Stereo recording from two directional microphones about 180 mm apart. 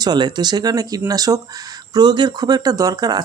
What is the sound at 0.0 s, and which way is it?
Speech, 25° right (ahead or behind).